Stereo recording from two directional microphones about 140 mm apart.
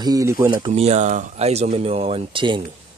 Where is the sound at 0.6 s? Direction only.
45° right (ahead or behind).